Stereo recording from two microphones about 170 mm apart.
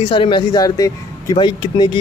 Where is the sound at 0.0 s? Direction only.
30° left (ahead or behind).